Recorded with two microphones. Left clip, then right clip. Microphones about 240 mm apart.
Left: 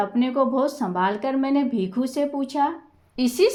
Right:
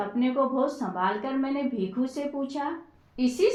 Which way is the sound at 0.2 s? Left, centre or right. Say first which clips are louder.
Left 2 dB; left.